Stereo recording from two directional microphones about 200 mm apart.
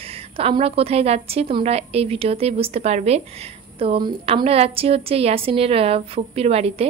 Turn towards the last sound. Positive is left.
turn(degrees=-30)  # may be behind; listen again after turning